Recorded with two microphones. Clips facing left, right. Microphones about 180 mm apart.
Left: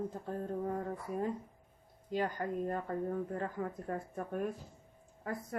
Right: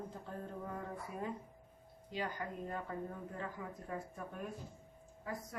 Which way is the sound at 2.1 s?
45° left (ahead or behind).